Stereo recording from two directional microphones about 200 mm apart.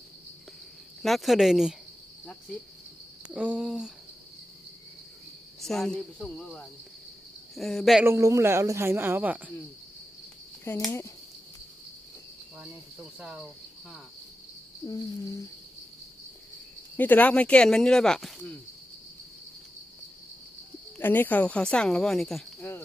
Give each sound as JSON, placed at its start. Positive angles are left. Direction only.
{"t": 1.0, "sound": "speech", "side_deg": 0}
{"t": 3.2, "sound": "speech", "side_deg": -5}
{"t": 5.5, "sound": "speech", "side_deg": 0}
{"t": 8.0, "sound": "speech", "side_deg": -15}
{"t": 10.6, "sound": "speech", "side_deg": 15}
{"t": 13.1, "sound": "speech", "side_deg": -5}
{"t": 14.8, "sound": "a sound", "side_deg": 15}
{"t": 17.0, "sound": "speech", "side_deg": 10}
{"t": 21.0, "sound": "speech", "side_deg": 10}